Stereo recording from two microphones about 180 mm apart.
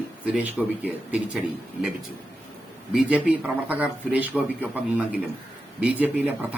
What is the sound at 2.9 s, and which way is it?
A man's voice, 5° right (ahead or behind).